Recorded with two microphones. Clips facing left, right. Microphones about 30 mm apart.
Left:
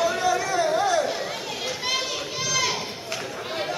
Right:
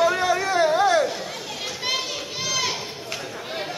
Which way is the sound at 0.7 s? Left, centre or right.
Centre.